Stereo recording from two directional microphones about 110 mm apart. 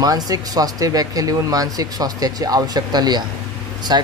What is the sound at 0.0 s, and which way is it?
Speech, 35° right (ahead or behind).